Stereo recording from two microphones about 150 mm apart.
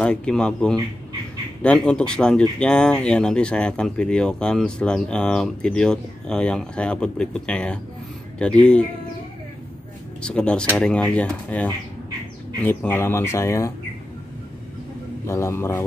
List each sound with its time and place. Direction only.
0.0 s speech: 5° left (ahead or behind)
10.2 s speech: 5° left (ahead or behind)
15.2 s speech: 15° left (ahead or behind)